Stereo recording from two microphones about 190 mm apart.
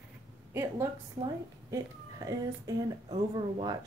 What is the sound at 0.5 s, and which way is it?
A woman's voice, 15° right (ahead or behind).